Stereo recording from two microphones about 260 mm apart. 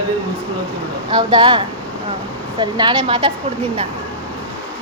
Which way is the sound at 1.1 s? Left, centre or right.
Centre.